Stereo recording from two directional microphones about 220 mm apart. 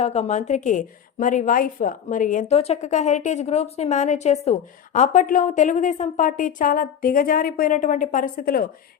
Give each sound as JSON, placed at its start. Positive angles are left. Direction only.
{"t": 0.0, "sound": "a woman's voice", "side_deg": 30}